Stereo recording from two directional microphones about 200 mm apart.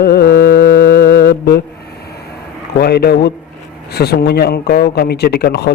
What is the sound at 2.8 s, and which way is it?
Music, 50° left (ahead or behind).